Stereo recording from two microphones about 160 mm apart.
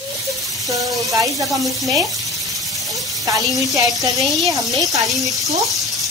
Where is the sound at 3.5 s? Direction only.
20° right (ahead or behind).